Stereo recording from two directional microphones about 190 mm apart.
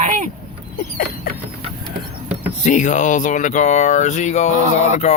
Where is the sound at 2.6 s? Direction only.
40° left (ahead or behind).